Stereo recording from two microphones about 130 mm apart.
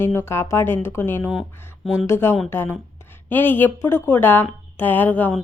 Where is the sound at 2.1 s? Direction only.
20° left (ahead or behind).